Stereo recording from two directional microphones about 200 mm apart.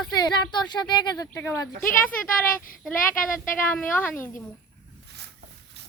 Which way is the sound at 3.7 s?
10° left (ahead or behind).